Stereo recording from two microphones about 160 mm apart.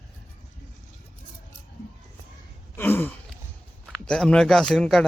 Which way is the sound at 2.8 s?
15° left (ahead or behind).